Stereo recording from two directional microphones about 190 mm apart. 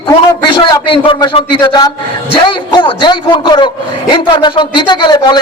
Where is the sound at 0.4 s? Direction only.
25° left (ahead or behind).